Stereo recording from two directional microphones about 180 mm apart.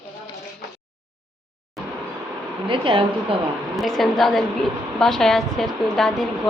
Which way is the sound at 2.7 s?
30° right (ahead or behind).